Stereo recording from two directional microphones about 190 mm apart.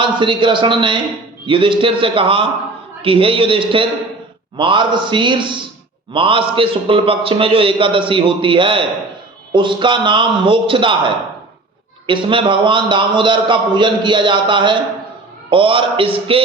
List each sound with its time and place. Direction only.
0.0 s a man's voice: 25° right (ahead or behind)
12.0 s a man's voice: 25° right (ahead or behind)